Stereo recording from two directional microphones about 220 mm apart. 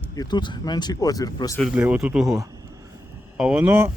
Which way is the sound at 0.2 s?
20° left (ahead or behind).